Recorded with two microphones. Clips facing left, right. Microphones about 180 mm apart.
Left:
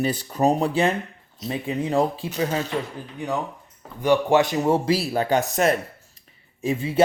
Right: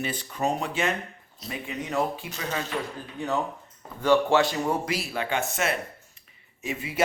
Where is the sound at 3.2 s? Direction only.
15° left (ahead or behind).